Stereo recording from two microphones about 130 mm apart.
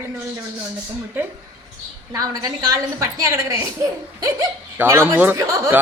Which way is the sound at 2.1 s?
30° right (ahead or behind).